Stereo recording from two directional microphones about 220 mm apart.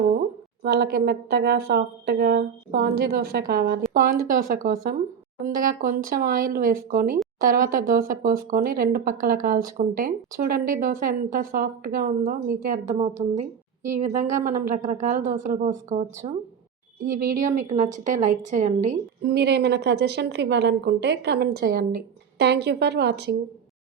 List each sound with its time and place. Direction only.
0.6 s speech: 45° right (ahead or behind)
19.3 s speech: 50° right (ahead or behind)